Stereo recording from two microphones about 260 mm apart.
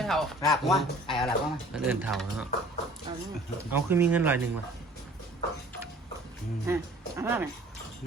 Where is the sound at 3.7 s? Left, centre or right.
Centre.